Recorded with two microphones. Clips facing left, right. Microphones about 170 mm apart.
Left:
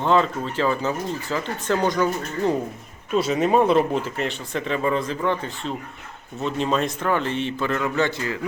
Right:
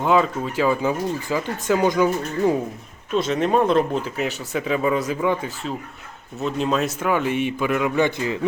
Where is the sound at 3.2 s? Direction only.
10° left (ahead or behind).